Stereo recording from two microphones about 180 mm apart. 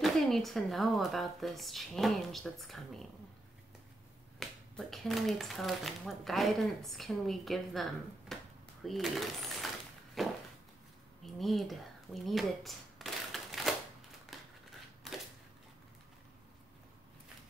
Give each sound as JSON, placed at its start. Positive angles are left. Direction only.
{"t": 0.0, "sound": "speech", "side_deg": 0}
{"t": 4.4, "sound": "speech", "side_deg": 0}
{"t": 11.2, "sound": "a sound", "side_deg": 0}
{"t": 14.3, "sound": "typewriter", "side_deg": 0}